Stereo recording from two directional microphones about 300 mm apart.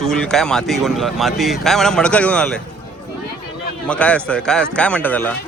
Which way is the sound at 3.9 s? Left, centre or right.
Centre.